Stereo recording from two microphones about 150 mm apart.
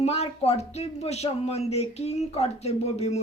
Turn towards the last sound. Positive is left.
turn(degrees=45)  # may be behind; listen again after turning